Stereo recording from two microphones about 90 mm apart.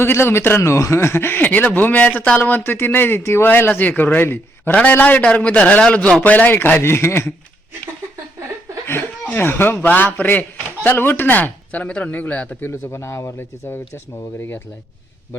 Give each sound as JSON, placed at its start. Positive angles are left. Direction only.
{"t": 0.0, "sound": "speech", "side_deg": 30}
{"t": 9.3, "sound": "speech", "side_deg": 25}
{"t": 12.6, "sound": "speech", "side_deg": 30}